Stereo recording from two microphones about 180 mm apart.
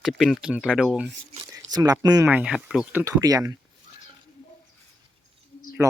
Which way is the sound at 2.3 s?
5° right (ahead or behind).